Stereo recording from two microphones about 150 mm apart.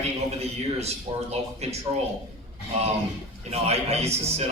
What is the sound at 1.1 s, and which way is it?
Speech, 40° right (ahead or behind).